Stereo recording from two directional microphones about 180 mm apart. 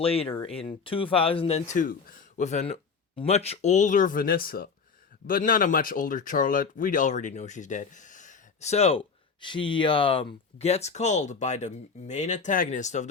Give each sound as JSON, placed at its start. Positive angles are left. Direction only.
{"t": 0.0, "sound": "speech", "side_deg": 30}